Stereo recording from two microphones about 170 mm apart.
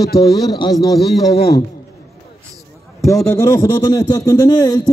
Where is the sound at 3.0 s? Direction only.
20° left (ahead or behind).